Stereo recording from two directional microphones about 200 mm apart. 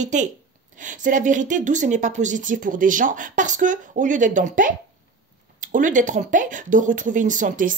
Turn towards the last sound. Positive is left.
turn(degrees=-40)  # may be behind; listen again after turning